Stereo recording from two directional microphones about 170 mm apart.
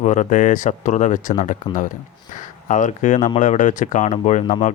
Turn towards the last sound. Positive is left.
turn(degrees=45)  # may be behind; listen again after turning